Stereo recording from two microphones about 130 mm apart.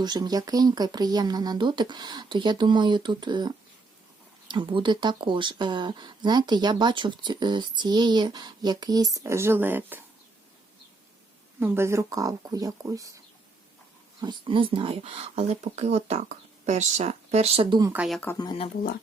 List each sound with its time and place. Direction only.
0.0 s speech: 30° right (ahead or behind); by 10.0 s 15° right (ahead or behind)
11.6 s speech: 20° right (ahead or behind)
14.2 s speech: 35° right (ahead or behind)
17.9 s speech: 5° right (ahead or behind)